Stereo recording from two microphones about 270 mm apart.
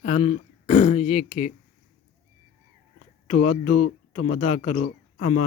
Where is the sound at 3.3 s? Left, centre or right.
Left.